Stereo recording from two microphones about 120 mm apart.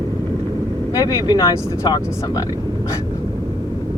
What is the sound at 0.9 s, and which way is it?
Speech, 30° left (ahead or behind).